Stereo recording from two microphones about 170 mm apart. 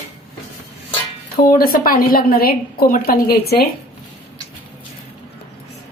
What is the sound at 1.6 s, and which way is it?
A woman's voice, 60° left (ahead or behind).